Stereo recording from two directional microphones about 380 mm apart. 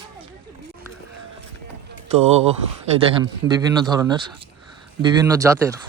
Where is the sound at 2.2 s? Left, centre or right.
Centre.